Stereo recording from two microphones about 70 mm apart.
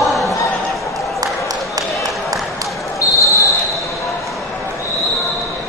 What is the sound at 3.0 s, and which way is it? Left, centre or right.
Basketball bounce, left.